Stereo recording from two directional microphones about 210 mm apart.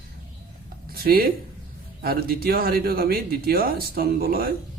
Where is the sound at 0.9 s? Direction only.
45° right (ahead or behind).